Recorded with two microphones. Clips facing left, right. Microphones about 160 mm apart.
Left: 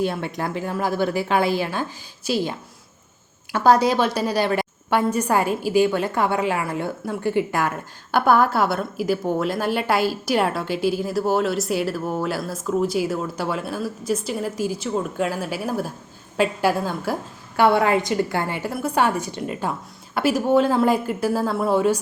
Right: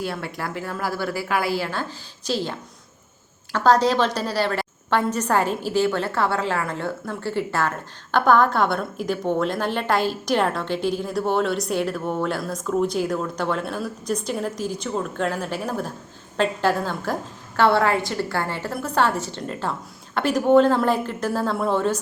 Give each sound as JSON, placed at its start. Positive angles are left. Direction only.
{"t": 0.0, "sound": "a woman's voice", "side_deg": 20}